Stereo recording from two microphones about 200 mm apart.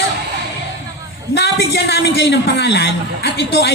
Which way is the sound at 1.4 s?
55° left (ahead or behind).